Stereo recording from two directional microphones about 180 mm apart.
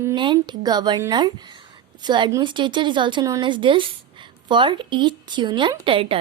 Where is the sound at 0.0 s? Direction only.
25° right (ahead or behind).